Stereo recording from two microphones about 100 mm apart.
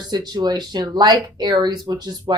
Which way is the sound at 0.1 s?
40° right (ahead or behind).